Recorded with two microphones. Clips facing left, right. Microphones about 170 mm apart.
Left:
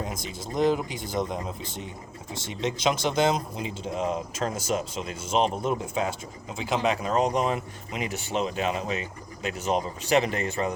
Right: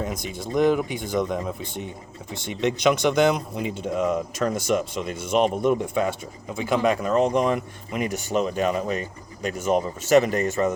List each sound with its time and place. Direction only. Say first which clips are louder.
0.0 s speech: right 4 dB; 60° right (ahead or behind); by 10.7 s 45° right (ahead or behind)